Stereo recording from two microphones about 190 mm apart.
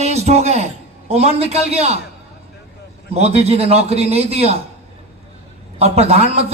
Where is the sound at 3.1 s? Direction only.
35° right (ahead or behind).